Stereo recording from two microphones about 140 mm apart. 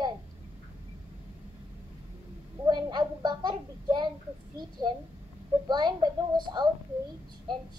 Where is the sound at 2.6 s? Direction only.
30° right (ahead or behind).